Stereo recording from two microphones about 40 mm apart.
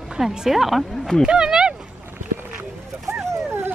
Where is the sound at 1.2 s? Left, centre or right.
Right.